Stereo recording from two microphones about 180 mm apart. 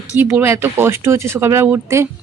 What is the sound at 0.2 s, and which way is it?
Speech, 10° right (ahead or behind).